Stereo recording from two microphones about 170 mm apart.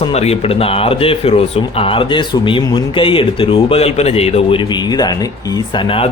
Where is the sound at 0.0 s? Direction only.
40° left (ahead or behind).